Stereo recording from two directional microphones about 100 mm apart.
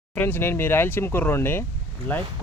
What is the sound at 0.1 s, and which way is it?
Speech, 20° left (ahead or behind).